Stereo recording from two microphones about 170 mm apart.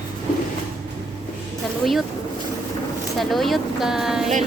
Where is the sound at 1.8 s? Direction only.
Centre (ahead or behind).